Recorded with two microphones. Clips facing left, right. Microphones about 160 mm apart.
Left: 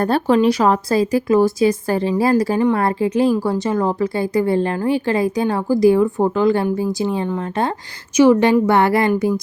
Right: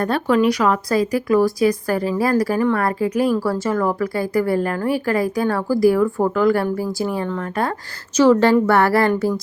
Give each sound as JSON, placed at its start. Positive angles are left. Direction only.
{"t": 0.0, "sound": "a woman's voice", "side_deg": 30}